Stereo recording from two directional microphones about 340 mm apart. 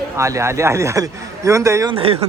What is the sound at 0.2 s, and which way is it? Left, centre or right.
A man's voice, centre.